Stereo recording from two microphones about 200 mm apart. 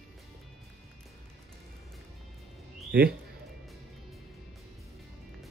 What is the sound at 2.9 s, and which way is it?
Speech, 50° right (ahead or behind).